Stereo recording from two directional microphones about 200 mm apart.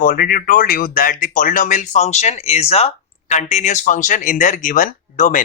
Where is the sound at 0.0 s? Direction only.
45° left (ahead or behind).